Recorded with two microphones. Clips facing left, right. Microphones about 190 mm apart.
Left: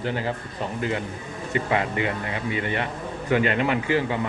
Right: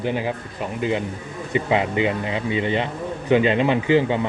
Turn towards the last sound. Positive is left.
turn(degrees=-20)  # may be behind; listen again after turning